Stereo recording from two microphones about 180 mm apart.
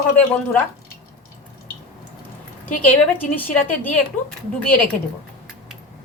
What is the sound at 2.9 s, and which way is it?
A woman's voice, 10° left (ahead or behind).